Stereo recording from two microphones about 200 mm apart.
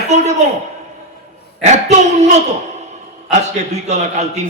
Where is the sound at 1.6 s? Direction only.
35° right (ahead or behind).